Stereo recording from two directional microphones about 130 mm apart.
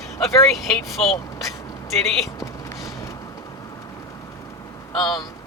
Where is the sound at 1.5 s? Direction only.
25° left (ahead or behind).